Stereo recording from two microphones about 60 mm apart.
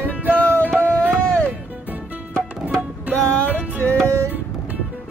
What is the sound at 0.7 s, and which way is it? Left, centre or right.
Music, centre.